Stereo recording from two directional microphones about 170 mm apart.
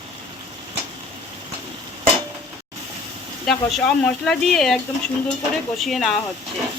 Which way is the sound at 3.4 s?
5° left (ahead or behind).